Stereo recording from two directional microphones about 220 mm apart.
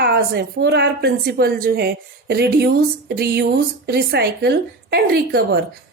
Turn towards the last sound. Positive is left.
turn(degrees=-45)  # may be behind; listen again after turning